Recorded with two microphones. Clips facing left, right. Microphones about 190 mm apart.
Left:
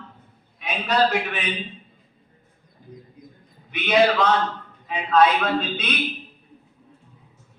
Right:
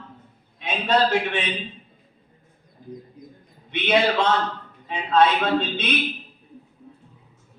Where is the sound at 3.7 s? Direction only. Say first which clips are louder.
Left 2 dB; 25° right (ahead or behind).